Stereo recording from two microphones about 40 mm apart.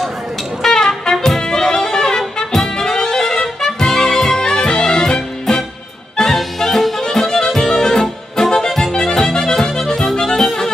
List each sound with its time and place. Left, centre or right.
0.6 s music: centre
6.2 s music: centre